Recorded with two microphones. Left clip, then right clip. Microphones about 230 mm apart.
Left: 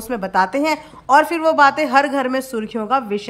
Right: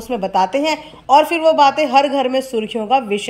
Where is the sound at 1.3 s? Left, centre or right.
Centre.